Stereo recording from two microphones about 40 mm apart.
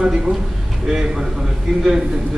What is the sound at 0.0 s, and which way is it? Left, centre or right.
A man's voice, centre.